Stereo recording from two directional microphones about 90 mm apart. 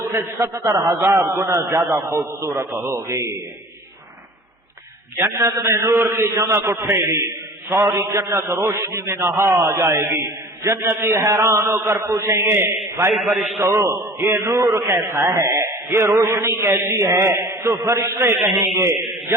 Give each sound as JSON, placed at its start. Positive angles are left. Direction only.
{"t": 0.1, "sound": "a man's voice", "side_deg": -30}
{"t": 5.1, "sound": "a man's voice", "side_deg": -30}
{"t": 13.1, "sound": "a man's voice", "side_deg": 0}
{"t": 13.6, "sound": "a man's voice", "side_deg": -30}